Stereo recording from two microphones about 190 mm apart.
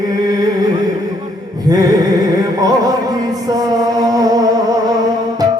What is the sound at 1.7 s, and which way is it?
Music, 20° right (ahead or behind).